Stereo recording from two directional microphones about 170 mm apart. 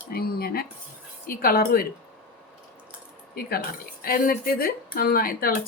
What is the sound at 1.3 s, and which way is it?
Speech, 60° left (ahead or behind).